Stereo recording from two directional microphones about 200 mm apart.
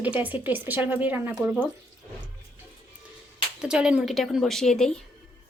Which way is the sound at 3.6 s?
5° right (ahead or behind).